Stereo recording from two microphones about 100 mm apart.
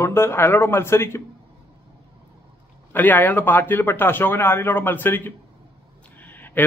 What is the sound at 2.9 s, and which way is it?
Speech, 20° left (ahead or behind).